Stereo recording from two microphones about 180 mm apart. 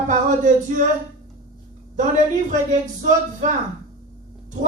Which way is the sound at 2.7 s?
45° right (ahead or behind).